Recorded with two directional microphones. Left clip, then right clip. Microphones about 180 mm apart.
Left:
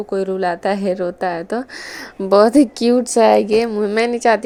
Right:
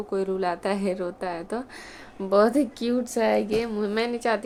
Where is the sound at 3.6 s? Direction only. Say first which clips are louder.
Left 9 dB; 35° left (ahead or behind).